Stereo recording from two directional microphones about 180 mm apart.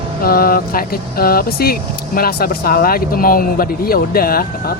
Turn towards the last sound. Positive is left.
turn(degrees=55)  # may be behind; listen again after turning